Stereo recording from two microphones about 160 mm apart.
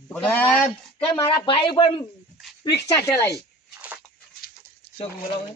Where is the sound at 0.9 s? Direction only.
35° left (ahead or behind).